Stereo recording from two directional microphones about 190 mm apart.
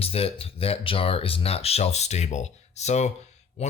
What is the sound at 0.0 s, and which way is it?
Speech, 30° left (ahead or behind).